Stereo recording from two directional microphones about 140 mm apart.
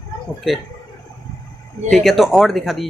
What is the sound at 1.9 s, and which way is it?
Speech, centre (ahead or behind).